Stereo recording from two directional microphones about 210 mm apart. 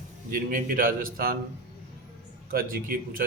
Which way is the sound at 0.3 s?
40° right (ahead or behind).